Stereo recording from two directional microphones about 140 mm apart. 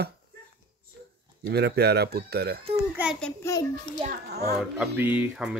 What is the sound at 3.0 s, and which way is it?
Speech, 10° right (ahead or behind).